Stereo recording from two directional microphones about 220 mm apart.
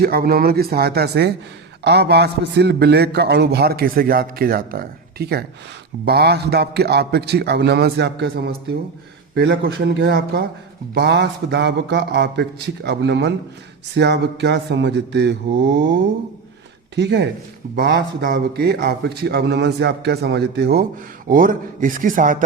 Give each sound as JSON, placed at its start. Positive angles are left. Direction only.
{"t": 0.0, "sound": "a man's voice", "side_deg": -45}